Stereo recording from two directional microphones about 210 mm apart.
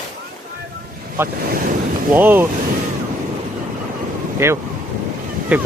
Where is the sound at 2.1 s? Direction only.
10° right (ahead or behind).